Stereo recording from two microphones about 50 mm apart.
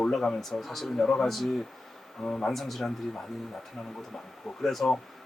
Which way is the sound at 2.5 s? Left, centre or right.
Centre.